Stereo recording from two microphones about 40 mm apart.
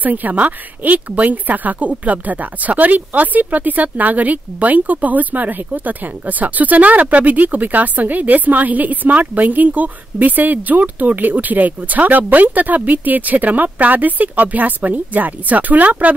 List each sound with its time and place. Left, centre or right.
0.0 s a woman's voice: right